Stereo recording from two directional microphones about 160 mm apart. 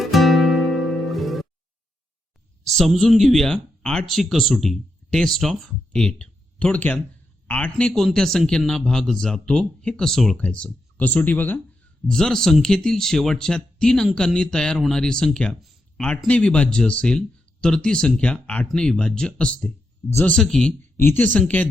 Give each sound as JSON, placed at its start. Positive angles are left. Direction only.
{"t": 0.0, "sound": "music", "side_deg": 0}
{"t": 2.7, "sound": "speech", "side_deg": 0}
{"t": 20.3, "sound": "speech", "side_deg": 5}